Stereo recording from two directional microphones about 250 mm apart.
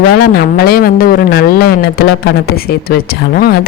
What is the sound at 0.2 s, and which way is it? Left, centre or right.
Speech, left.